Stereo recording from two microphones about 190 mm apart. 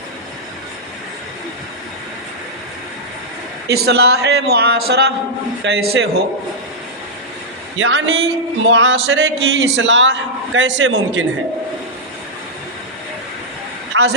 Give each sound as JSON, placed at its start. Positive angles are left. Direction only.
{"t": 3.7, "sound": "a man's voice", "side_deg": -55}
{"t": 7.8, "sound": "music", "side_deg": -70}
{"t": 9.0, "sound": "a man's voice", "side_deg": -90}
{"t": 13.9, "sound": "a woman's voice", "side_deg": -65}